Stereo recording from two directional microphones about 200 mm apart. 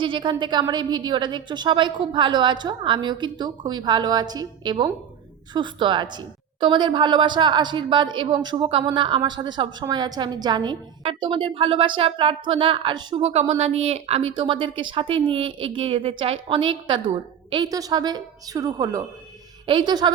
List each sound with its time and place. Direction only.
0.0 s a woman's voice: 25° right (ahead or behind)